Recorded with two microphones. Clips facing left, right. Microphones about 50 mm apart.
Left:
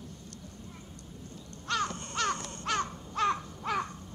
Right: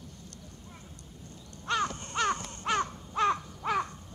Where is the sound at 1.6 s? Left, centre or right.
Right.